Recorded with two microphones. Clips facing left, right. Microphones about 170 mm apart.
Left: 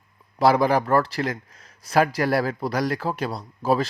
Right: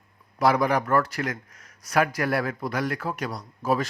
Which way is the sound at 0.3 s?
30° left (ahead or behind).